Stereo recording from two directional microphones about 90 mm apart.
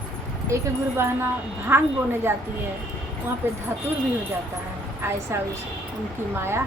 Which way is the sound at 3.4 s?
25° right (ahead or behind).